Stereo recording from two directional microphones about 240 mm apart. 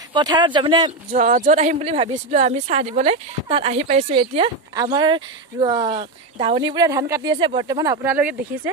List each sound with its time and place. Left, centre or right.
0.1 s speech: centre
1.1 s speech: right; by 8.7 s centre